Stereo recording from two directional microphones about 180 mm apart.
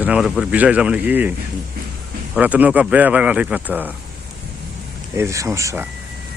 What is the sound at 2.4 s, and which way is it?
Speech, 10° right (ahead or behind).